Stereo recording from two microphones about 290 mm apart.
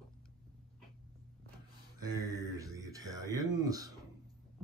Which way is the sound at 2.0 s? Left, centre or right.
Centre.